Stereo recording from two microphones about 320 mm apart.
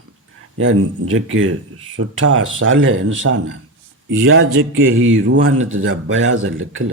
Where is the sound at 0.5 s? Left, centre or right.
Right.